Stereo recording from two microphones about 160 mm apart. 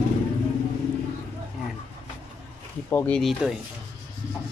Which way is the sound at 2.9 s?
10° left (ahead or behind).